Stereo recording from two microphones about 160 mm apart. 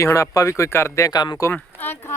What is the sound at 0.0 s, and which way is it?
Speech, 20° left (ahead or behind).